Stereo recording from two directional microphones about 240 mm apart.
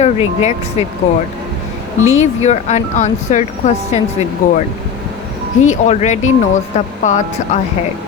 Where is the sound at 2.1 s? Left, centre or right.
Left.